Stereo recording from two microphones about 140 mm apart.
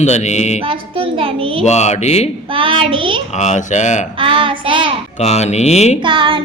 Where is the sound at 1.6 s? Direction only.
55° left (ahead or behind).